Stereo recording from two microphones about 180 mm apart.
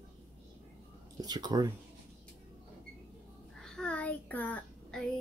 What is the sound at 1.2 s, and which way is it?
Speech, 20° right (ahead or behind).